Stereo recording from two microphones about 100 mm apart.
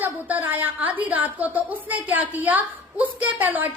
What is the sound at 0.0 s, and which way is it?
A woman's voice, 15° right (ahead or behind).